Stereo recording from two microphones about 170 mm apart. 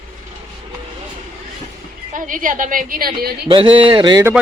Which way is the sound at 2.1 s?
50° right (ahead or behind).